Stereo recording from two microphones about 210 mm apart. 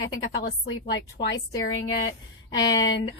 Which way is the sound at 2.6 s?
60° left (ahead or behind).